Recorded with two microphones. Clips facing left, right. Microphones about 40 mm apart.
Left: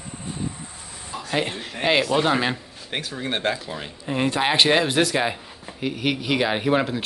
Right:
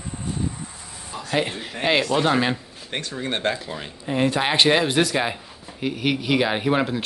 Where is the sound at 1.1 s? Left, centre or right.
Centre.